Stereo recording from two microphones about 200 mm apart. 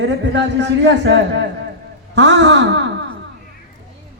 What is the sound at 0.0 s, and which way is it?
A man's voice, 65° right (ahead or behind).